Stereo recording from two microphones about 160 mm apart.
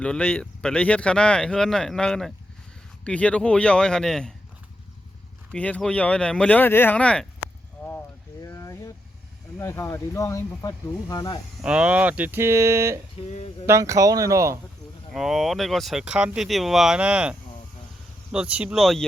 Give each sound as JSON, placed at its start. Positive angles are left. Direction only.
{"t": 0.0, "sound": "speech", "side_deg": 10}
{"t": 5.5, "sound": "speech", "side_deg": 10}
{"t": 8.4, "sound": "a sound", "side_deg": 20}
{"t": 9.6, "sound": "speech", "side_deg": 15}
{"t": 11.6, "sound": "speech", "side_deg": -5}
{"t": 13.2, "sound": "speech", "side_deg": 40}
{"t": 13.7, "sound": "speech", "side_deg": -20}
{"t": 15.1, "sound": "speech", "side_deg": 0}